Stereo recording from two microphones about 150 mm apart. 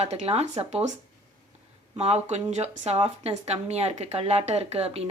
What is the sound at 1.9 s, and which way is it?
Speech, 45° right (ahead or behind).